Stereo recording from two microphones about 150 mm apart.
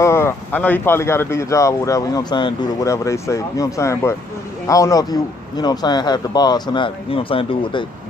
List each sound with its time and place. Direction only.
0.0 s a man's voice: 15° left (ahead or behind); by 7.8 s 35° left (ahead or behind)